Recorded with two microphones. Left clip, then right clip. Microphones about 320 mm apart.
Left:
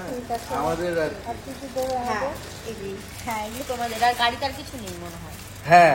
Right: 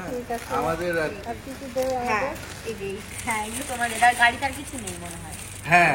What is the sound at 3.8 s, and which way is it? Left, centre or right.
Speech, centre.